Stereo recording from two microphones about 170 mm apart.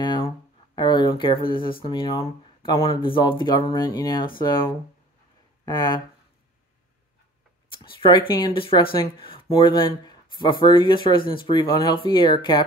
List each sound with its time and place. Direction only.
0.0 s a sound: 30° left (ahead or behind)
0.7 s speech: 25° left (ahead or behind)
5.7 s speech: 25° left (ahead or behind)
7.7 s speech: 30° left (ahead or behind)